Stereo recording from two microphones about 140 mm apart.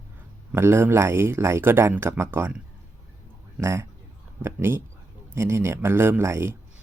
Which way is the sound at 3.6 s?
20° right (ahead or behind).